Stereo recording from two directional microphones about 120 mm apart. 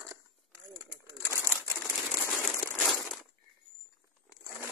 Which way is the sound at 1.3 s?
15° left (ahead or behind).